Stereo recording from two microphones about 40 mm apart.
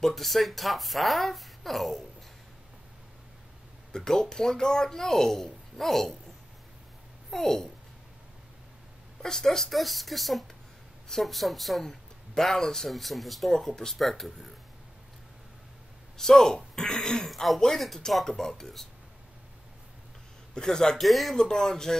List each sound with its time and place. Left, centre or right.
0.0 s speech: centre
3.9 s speech: centre
7.2 s a child's voice: centre
9.2 s speech: centre
12.9 s speech: centre
16.2 s speech: centre
17.3 s speech: centre
20.5 s speech: centre
21.0 s speech: centre
21.4 s speech: centre